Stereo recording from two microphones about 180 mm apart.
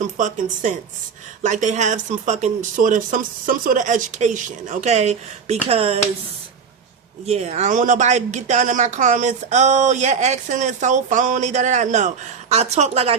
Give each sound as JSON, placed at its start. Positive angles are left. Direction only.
{"t": 0.2, "sound": "speech", "side_deg": -45}
{"t": 7.3, "sound": "speech", "side_deg": -35}